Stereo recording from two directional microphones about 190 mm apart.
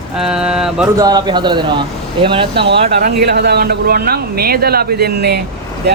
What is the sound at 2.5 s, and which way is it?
Speech, 60° right (ahead or behind).